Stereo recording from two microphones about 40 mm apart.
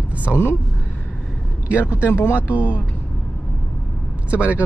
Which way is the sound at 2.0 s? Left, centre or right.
Left.